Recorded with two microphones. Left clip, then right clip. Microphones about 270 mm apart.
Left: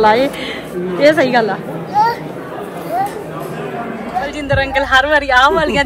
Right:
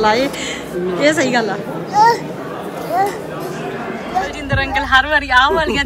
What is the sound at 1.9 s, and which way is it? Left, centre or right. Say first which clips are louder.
Children playing: right 2 dB; right.